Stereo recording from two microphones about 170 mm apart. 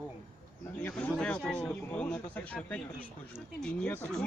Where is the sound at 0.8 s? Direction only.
10° left (ahead or behind).